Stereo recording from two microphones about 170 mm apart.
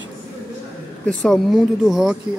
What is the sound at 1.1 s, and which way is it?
Speech, centre (ahead or behind).